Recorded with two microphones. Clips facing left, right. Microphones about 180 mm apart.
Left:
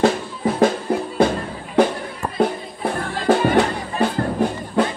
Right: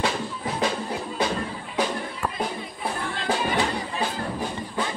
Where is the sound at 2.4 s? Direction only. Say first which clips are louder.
Left 8 dB; 55° left (ahead or behind).